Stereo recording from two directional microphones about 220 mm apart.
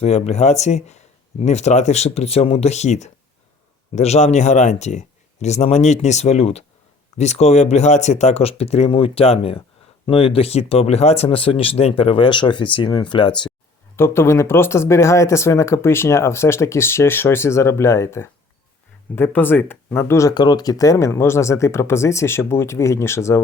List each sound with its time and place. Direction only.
0.0 s speech: 30° left (ahead or behind)
13.9 s speech: 10° left (ahead or behind)